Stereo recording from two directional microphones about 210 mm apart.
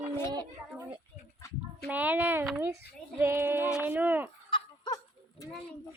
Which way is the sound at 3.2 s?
10° right (ahead or behind).